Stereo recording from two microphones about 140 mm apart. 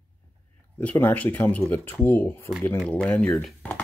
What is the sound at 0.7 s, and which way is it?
Speech, 15° left (ahead or behind).